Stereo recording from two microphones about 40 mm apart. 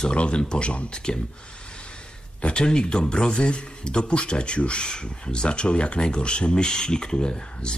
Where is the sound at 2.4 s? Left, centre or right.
Left.